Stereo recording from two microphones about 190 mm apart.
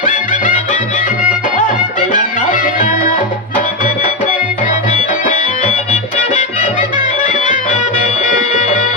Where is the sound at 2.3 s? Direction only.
45° left (ahead or behind).